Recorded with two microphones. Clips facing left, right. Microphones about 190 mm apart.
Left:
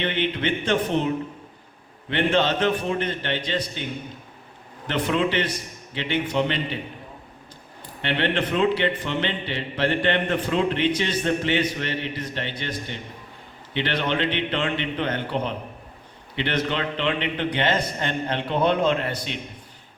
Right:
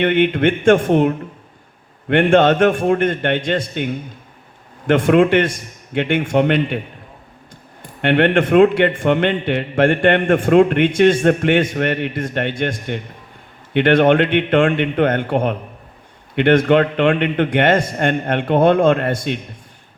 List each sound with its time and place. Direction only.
0.0 s a man's voice: 55° right (ahead or behind)
4.9 s a man's voice: 50° right (ahead or behind)
8.0 s a man's voice: 55° right (ahead or behind)